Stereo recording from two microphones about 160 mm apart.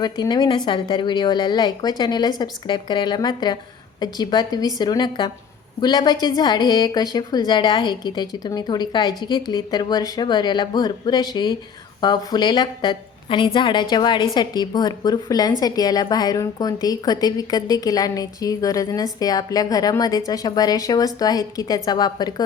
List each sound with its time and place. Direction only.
0.0 s a woman's voice: 25° left (ahead or behind)